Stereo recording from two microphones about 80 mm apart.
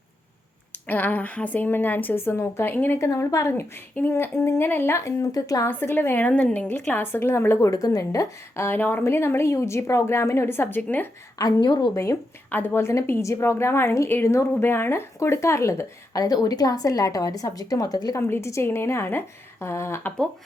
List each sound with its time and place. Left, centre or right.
0.7 s a woman's voice: left
2.7 s a woman's voice: left
3.0 s a woman's voice: left
3.9 s a woman's voice: left
5.6 s a woman's voice: left
8.6 s a woman's voice: left
11.3 s a woman's voice: left
12.5 s a woman's voice: left
18.2 s a woman's voice: left